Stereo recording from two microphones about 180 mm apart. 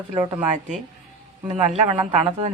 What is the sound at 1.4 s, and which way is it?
Speech, 35° right (ahead or behind).